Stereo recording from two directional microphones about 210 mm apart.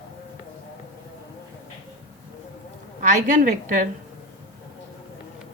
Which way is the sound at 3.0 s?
35° right (ahead or behind).